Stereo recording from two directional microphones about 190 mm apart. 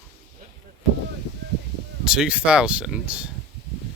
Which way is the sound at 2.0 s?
5° right (ahead or behind).